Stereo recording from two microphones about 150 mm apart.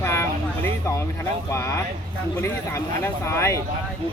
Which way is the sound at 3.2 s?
20° left (ahead or behind).